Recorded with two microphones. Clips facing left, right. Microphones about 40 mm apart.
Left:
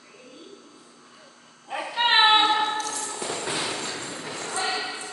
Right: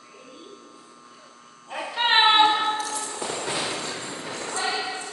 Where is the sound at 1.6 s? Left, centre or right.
Centre.